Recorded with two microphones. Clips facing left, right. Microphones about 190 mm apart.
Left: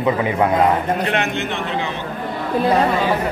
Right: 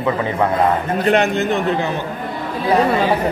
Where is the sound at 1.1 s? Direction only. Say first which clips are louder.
Right 6 dB; 40° right (ahead or behind).